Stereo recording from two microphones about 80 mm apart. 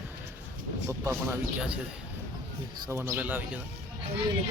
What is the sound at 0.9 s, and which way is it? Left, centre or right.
Speech, right.